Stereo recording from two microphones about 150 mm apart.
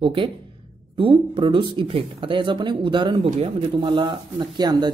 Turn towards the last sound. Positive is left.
turn(degrees=-30)  # may be behind; listen again after turning